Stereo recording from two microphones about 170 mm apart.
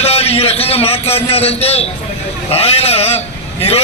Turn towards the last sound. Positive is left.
turn(degrees=35)  # may be behind; listen again after turning